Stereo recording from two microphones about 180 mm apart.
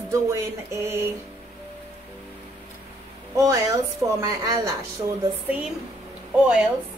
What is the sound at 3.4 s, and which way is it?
A woman's voice, 20° right (ahead or behind).